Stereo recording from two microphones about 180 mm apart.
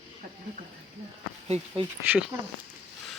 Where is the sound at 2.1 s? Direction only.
10° right (ahead or behind).